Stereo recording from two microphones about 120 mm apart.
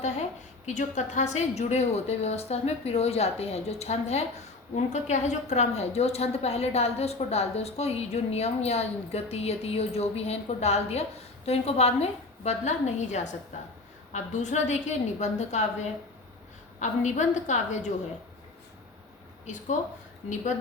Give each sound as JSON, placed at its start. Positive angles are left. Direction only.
{"t": 0.0, "sound": "a woman's voice", "side_deg": 70}
{"t": 4.7, "sound": "a woman's voice", "side_deg": 75}
{"t": 16.8, "sound": "a woman's voice", "side_deg": 85}